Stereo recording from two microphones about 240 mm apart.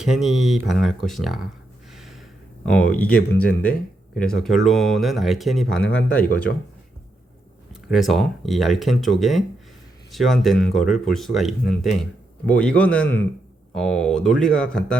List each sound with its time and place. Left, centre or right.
0.0 s speech: centre
1.9 s gasp: centre
2.6 s speech: centre
6.5 s speech: left
7.7 s a man's voice: centre